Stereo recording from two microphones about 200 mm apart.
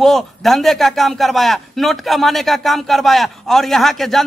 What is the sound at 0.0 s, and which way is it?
A man's voice, centre (ahead or behind).